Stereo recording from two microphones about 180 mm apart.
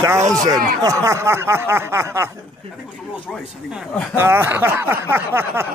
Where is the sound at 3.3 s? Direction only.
Centre (ahead or behind).